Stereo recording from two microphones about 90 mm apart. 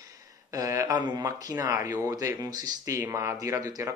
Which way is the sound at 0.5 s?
40° right (ahead or behind).